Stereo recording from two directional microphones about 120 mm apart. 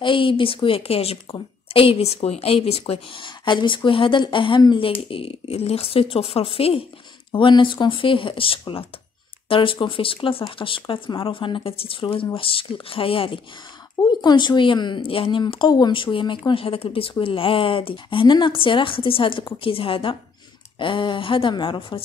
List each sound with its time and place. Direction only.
0.0 s speech: 45° left (ahead or behind)
14.2 s speech: 40° left (ahead or behind)